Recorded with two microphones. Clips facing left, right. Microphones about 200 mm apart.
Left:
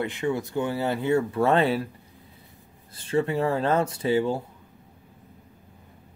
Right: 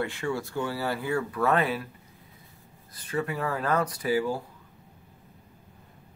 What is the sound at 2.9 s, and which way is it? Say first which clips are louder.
Speech: left 6 dB; 30° left (ahead or behind).